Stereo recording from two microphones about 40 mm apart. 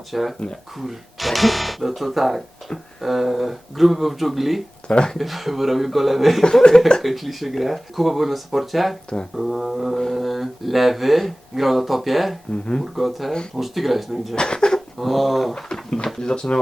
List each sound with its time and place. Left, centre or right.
0.1 s speech: centre
4.9 s speech: left
5.1 s speech: centre
6.4 s speech: centre
7.0 s speech: centre
14.3 s speech: centre
14.9 s speech: centre
15.5 s speech: centre